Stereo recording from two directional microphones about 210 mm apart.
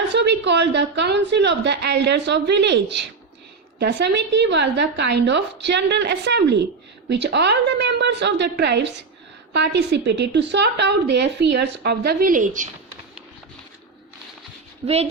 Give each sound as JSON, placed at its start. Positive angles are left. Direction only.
{"t": 0.1, "sound": "a woman's voice", "side_deg": -55}
{"t": 14.8, "sound": "speech", "side_deg": -30}